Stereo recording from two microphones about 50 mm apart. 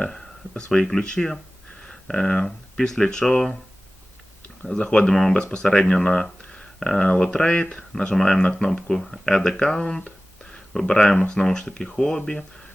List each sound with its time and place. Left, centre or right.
0.1 s speech: centre
4.7 s speech: centre